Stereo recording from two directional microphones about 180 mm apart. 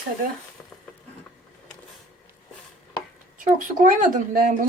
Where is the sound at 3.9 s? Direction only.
50° right (ahead or behind).